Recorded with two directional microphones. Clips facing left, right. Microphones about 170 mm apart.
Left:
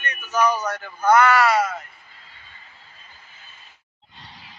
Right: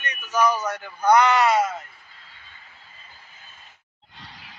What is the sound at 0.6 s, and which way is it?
A man's voice, 15° right (ahead or behind).